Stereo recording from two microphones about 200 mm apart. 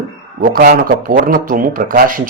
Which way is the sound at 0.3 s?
45° right (ahead or behind).